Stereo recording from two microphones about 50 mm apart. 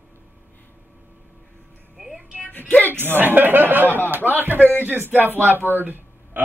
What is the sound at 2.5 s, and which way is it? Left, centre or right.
Music, left.